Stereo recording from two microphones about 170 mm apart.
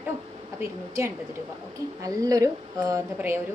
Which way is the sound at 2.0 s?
20° right (ahead or behind).